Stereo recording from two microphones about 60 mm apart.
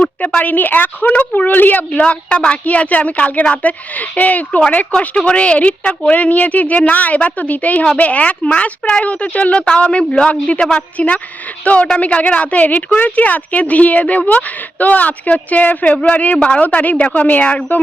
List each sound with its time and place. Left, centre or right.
0.0 s a sound: centre
0.3 s speech: left
1.9 s speech: centre
4.9 s speech: centre